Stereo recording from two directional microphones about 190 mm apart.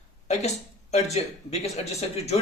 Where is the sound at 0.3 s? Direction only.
35° left (ahead or behind).